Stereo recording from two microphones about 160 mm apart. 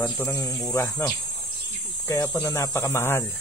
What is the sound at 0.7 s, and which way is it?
Cricket, 20° left (ahead or behind).